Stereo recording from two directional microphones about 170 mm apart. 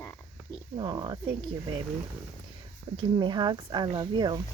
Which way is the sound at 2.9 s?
30° right (ahead or behind).